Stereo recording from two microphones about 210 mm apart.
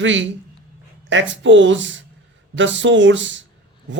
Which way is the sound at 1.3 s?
60° right (ahead or behind).